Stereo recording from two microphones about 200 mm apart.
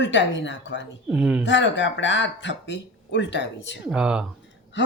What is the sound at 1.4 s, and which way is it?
Speech, 65° left (ahead or behind).